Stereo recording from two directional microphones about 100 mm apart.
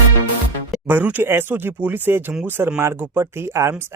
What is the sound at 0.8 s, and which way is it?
Speech, 20° right (ahead or behind).